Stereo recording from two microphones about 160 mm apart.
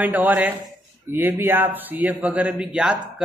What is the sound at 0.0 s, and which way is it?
A man's voice, 10° right (ahead or behind).